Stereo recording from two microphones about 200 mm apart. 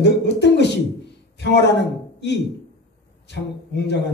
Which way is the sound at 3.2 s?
60° left (ahead or behind).